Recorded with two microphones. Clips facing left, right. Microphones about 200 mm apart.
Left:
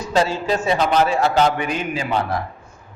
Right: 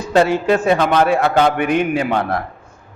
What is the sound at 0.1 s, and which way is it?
A man's voice, 60° right (ahead or behind).